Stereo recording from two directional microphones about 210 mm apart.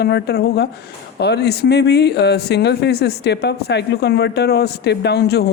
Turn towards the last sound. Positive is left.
turn(degrees=50)  # may be behind; listen again after turning